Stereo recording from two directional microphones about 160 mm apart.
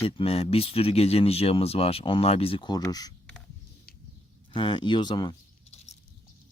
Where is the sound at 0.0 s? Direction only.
35° left (ahead or behind).